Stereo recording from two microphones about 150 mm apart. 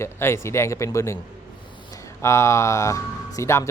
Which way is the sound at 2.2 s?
20° left (ahead or behind).